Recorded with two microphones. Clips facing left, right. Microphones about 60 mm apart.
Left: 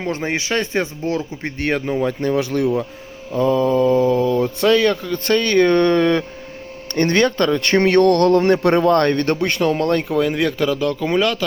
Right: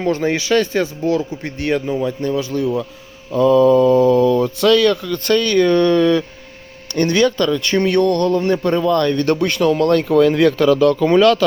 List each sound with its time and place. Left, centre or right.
0.0 s speech: left
2.0 s a man's voice: left
3.3 s speech: left
7.6 s a man's voice: left
8.8 s speech: left
9.3 s speech: left
10.2 s speech: centre